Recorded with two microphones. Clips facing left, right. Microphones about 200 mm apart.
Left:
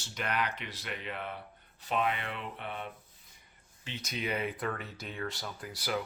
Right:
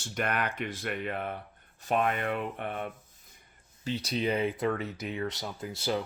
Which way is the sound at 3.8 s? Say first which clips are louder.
Right 8 dB; 35° right (ahead or behind).